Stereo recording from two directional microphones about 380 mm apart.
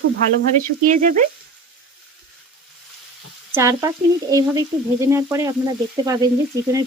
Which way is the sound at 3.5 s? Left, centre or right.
Centre.